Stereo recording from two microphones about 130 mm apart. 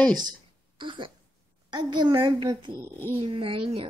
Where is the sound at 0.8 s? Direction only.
40° right (ahead or behind).